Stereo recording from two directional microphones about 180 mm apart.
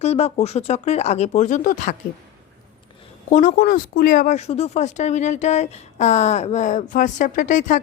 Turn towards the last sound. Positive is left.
turn(degrees=45)  # may be behind; listen again after turning